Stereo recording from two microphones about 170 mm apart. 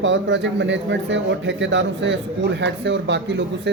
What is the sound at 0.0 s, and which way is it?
A man's voice, 90° right.